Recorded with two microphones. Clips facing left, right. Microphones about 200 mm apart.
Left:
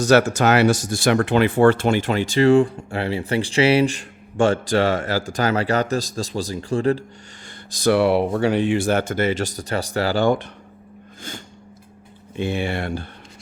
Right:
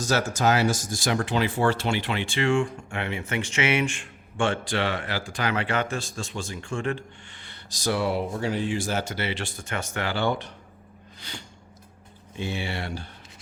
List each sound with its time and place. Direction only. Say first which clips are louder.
0.0 s speech: left 8 dB; 70° left (ahead or behind); by 7.0 s 35° left (ahead or behind)
7.4 s speech: left 9 dB; 55° left (ahead or behind)
11.2 s snort: left 6 dB; 45° left (ahead or behind)
12.4 s speech: left 7 dB; 55° left (ahead or behind)